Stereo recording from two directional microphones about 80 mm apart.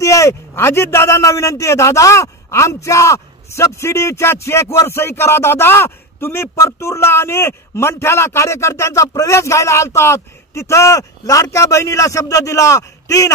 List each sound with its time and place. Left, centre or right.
0.0 s a man's voice: left